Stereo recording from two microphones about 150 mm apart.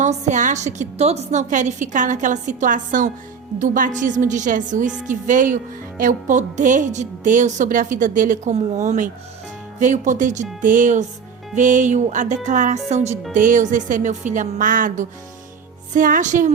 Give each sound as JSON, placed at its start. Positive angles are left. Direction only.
{"t": 0.0, "sound": "a woman's voice", "side_deg": -55}
{"t": 8.5, "sound": "a woman's voice", "side_deg": -50}